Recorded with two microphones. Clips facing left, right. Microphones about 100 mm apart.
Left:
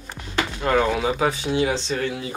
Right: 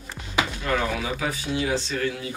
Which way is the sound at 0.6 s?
40° left (ahead or behind).